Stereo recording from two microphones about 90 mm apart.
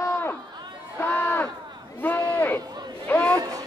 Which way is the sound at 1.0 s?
20° left (ahead or behind).